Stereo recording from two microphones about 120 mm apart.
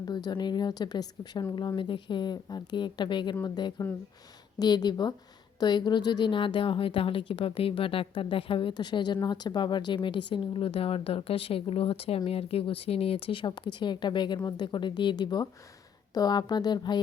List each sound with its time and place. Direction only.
0.1 s speech: 35° left (ahead or behind)